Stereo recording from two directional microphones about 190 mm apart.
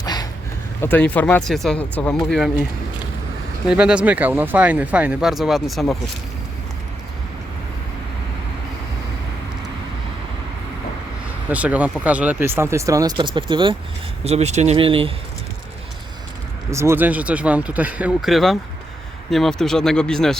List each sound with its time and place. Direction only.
0.0 s a sound: 20° left (ahead or behind)
0.8 s speech: 10° left (ahead or behind)
3.7 s speech: 5° right (ahead or behind)
11.4 s speech: 5° right (ahead or behind); by 15.1 s 30° right (ahead or behind)
16.7 s speech: 15° right (ahead or behind); by 20.4 s 5° left (ahead or behind)